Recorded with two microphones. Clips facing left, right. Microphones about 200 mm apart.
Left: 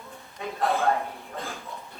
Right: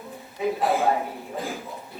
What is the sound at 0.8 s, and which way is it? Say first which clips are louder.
Speech: right 2 dB; 15° right (ahead or behind).